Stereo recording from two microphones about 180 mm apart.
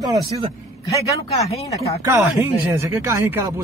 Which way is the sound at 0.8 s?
20° left (ahead or behind).